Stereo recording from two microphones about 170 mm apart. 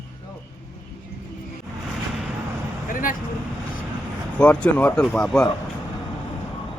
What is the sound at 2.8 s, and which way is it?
Vehicle, 55° left (ahead or behind).